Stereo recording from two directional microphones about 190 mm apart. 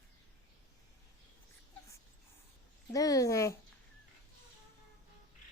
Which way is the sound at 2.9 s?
20° left (ahead or behind).